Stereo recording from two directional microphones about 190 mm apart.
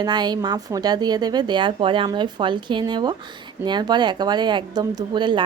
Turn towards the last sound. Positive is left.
turn(degrees=-25)  # may be behind; listen again after turning